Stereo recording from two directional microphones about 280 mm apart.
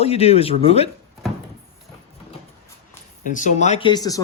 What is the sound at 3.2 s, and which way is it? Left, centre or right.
Speech, left.